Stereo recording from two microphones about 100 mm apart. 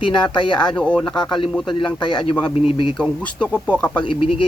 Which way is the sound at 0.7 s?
10° left (ahead or behind).